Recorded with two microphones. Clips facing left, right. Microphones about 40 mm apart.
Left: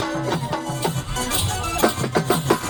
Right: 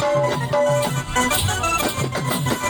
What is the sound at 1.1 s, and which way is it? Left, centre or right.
Music, right.